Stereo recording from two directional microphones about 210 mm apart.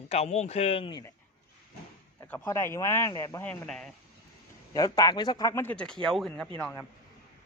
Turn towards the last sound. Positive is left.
turn(degrees=5)  # may be behind; listen again after turning